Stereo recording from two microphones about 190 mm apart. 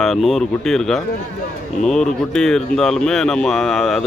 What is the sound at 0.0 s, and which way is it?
Speech, centre (ahead or behind).